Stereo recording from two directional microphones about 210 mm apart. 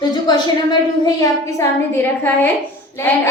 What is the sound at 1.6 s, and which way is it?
Speech, 10° left (ahead or behind).